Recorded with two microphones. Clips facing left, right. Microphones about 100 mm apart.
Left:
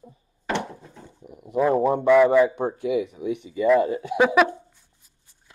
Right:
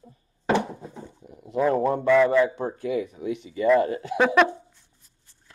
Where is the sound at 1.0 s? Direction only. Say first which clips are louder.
Even; 5° left (ahead or behind).